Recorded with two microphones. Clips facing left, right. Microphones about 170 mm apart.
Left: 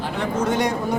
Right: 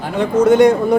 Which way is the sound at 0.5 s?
55° right (ahead or behind).